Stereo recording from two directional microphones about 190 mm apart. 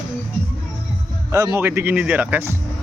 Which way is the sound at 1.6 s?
10° right (ahead or behind).